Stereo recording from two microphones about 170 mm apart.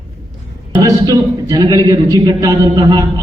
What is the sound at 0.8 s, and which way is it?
A man's voice, 20° right (ahead or behind).